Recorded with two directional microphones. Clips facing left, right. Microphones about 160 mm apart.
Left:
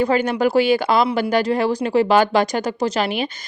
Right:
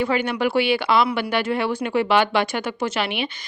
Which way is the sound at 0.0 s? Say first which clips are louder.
Left 4 dB; 40° left (ahead or behind).